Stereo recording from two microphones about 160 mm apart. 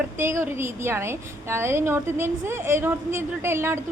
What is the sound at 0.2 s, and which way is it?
A woman's voice, 15° right (ahead or behind).